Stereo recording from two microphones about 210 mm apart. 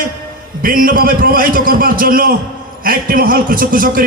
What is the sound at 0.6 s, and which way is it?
A man's voice, 45° right (ahead or behind).